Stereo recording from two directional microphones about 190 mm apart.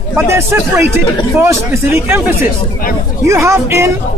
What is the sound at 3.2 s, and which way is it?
Speech, 15° right (ahead or behind).